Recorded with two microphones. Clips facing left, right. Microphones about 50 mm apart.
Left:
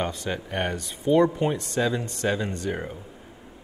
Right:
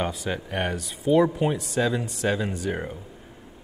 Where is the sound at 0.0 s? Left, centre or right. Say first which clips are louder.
Right 1 dB; centre.